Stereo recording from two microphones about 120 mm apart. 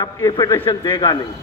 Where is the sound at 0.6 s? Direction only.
40° left (ahead or behind).